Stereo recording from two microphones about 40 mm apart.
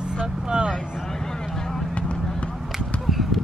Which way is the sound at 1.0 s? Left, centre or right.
Centre.